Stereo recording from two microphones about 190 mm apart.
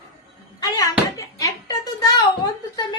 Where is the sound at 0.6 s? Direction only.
20° left (ahead or behind).